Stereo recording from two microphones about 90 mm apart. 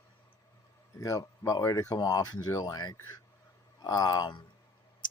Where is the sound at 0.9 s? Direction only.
40° left (ahead or behind).